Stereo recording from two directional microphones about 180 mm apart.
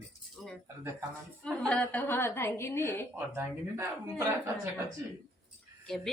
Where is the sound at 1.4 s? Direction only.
5° left (ahead or behind).